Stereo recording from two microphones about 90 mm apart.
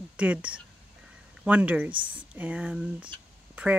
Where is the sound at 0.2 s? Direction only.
15° right (ahead or behind).